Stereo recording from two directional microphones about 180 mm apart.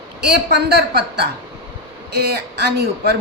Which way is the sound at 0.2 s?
65° right (ahead or behind).